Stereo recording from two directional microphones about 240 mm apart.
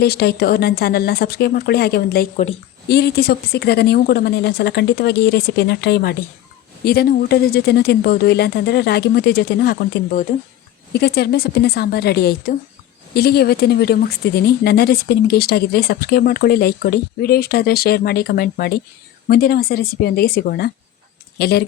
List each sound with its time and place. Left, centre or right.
0.0 s a woman's voice: left
10.9 s speech: left